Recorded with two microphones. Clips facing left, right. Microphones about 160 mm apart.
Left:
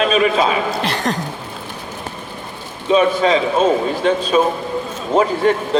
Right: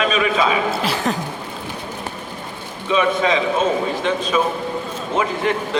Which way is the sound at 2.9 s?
35° left (ahead or behind).